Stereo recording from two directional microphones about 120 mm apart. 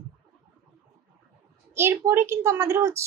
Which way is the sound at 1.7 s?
20° right (ahead or behind).